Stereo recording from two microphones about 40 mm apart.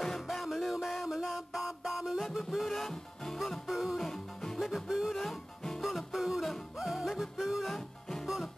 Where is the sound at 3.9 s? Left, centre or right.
Centre.